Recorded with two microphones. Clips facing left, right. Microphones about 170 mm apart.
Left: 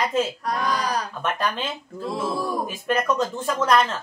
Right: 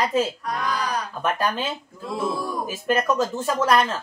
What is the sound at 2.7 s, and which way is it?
Speech, 5° right (ahead or behind).